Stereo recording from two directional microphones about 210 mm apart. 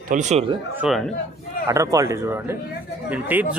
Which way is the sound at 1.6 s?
15° right (ahead or behind).